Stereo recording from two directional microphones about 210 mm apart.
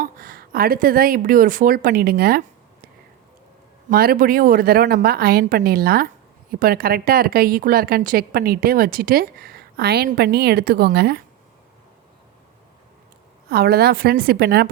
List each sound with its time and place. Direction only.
0.0 s a woman's voice: 45° right (ahead or behind)
3.8 s a woman's voice: 45° right (ahead or behind)
13.5 s a woman's voice: 50° right (ahead or behind)